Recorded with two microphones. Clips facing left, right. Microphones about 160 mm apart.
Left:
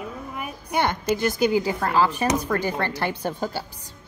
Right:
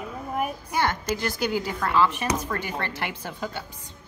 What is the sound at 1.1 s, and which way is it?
Speech, 20° left (ahead or behind).